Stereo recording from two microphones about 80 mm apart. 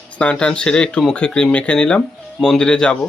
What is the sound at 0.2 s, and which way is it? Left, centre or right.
Speech, centre.